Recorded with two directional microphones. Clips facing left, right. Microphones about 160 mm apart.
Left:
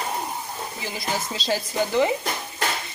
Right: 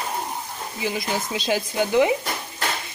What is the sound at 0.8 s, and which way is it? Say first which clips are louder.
Speech: right 4 dB; 15° right (ahead or behind).